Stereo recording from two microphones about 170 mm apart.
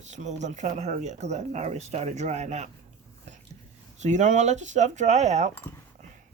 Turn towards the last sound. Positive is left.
turn(degrees=-40)  # may be behind; listen again after turning